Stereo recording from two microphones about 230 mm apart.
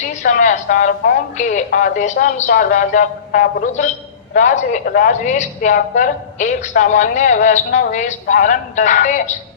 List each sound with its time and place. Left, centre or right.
0.0 s a woman's voice: left